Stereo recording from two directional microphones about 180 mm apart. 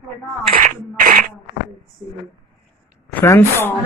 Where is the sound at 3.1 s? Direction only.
15° left (ahead or behind).